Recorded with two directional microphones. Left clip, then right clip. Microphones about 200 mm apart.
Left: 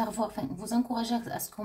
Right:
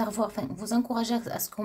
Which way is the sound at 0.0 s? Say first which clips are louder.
Right 2 dB; 40° right (ahead or behind).